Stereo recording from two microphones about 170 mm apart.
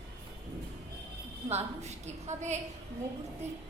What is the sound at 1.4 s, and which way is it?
A woman's voice, 40° right (ahead or behind).